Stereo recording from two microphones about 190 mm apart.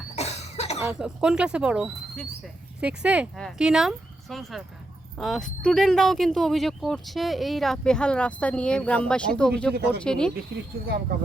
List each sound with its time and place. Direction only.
0.2 s cough: 35° left (ahead or behind)
0.9 s speech: 5° right (ahead or behind)
9.7 s speech: 60° right (ahead or behind)
10.0 s speech: 5° left (ahead or behind)